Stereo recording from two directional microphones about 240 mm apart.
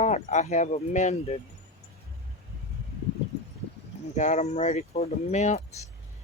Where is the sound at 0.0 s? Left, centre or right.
Left.